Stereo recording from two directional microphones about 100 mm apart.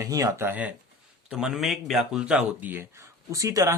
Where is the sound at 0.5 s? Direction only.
15° right (ahead or behind).